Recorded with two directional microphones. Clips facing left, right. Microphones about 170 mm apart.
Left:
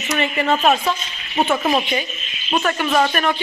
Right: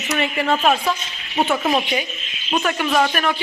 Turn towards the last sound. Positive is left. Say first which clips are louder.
# left 1 dB
turn(degrees=0)  # may be behind; listen again after turning